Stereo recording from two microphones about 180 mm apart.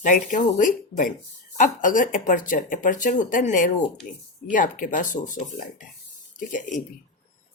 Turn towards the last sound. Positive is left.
turn(degrees=45)  # may be behind; listen again after turning